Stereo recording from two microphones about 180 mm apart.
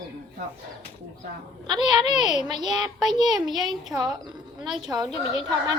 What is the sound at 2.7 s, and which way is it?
Speech, centre (ahead or behind).